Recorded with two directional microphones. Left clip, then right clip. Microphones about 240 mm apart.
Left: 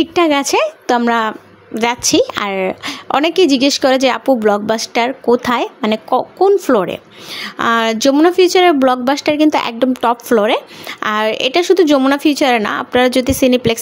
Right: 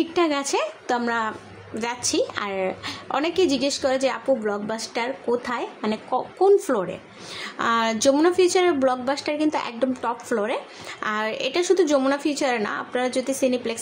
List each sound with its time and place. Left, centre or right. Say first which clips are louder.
0.0 s a woman's voice: left 9 dB; left